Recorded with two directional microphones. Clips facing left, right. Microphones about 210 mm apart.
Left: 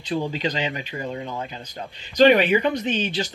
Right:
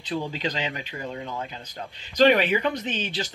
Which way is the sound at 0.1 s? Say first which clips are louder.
Left 4 dB; 15° left (ahead or behind).